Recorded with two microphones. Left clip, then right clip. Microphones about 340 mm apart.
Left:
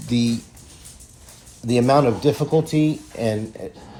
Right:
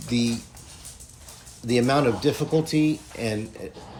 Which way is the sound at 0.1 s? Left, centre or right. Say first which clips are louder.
Left 3 dB; centre.